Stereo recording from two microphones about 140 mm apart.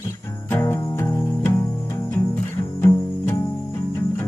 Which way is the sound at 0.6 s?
25° left (ahead or behind).